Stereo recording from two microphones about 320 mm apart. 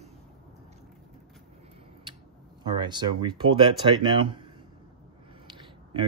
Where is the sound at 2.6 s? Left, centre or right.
Centre.